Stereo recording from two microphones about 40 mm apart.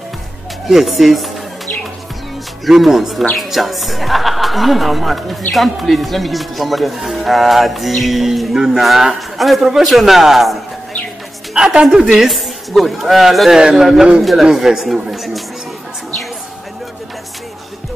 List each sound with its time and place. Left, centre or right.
0.7 s speech: centre
2.8 s speech: centre
8.5 s speech: centre
8.8 s speech: centre
11.5 s speech: centre
12.2 s a woman's voice: centre
13.6 s speech: right
14.9 s speech: centre